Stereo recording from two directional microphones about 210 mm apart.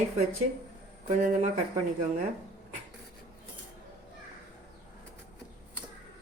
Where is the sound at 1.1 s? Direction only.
35° right (ahead or behind).